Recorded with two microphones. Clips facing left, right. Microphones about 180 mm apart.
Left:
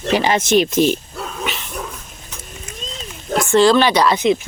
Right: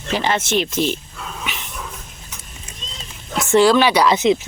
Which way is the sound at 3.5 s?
10° right (ahead or behind).